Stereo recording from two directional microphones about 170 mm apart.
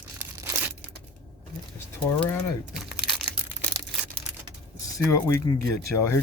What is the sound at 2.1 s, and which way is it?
Speech, 10° left (ahead or behind).